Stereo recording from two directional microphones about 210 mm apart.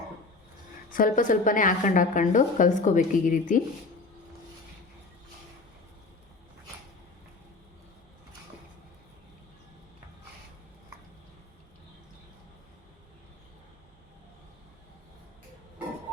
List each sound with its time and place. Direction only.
0.9 s a woman's voice: 40° left (ahead or behind)